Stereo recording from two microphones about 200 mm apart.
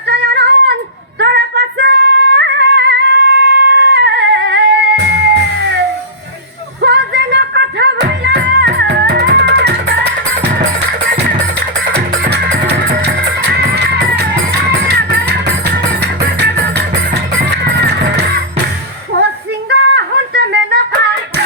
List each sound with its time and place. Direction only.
0.1 s female singing: 55° right (ahead or behind)
6.8 s music: 55° right (ahead or behind)
12.6 s music: 55° right (ahead or behind)
19.9 s a sound: 60° right (ahead or behind)